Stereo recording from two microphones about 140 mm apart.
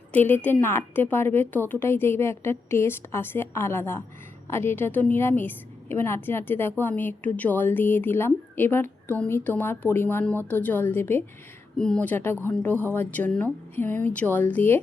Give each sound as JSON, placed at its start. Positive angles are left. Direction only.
{"t": 0.1, "sound": "a woman's voice", "side_deg": 15}